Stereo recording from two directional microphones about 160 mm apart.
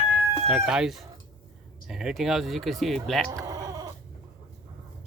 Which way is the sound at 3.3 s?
20° right (ahead or behind).